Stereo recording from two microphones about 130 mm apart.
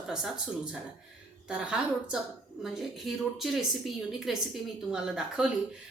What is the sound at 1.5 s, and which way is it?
A woman's voice, 5° right (ahead or behind).